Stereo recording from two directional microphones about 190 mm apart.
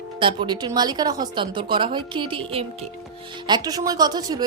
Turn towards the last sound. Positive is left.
turn(degrees=-20)  # may be behind; listen again after turning